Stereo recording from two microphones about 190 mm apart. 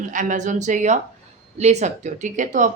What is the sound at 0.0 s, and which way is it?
Speech, 45° right (ahead or behind).